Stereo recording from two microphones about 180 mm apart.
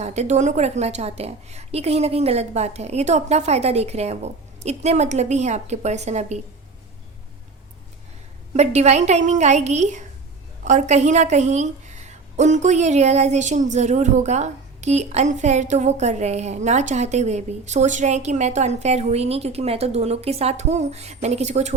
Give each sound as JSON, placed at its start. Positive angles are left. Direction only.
{"t": 0.0, "sound": "a woman's voice", "side_deg": -40}
{"t": 8.5, "sound": "a woman's voice", "side_deg": -40}